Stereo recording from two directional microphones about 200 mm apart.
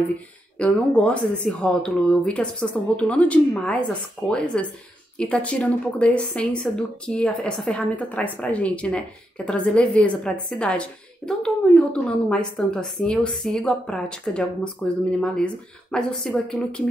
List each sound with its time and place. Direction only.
0.6 s a woman's voice: 5° left (ahead or behind)